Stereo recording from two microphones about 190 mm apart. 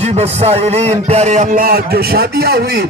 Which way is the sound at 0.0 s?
35° right (ahead or behind).